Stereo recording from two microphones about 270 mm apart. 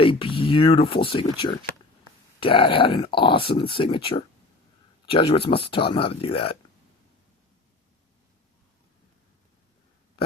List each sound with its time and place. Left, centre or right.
0.0 s speech: centre